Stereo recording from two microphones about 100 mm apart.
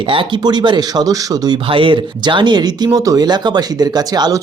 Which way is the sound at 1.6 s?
60° right (ahead or behind).